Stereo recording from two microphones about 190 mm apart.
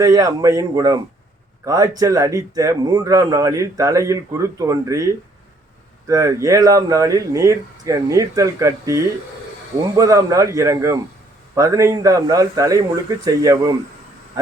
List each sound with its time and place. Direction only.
0.0 s a man's voice: 20° right (ahead or behind)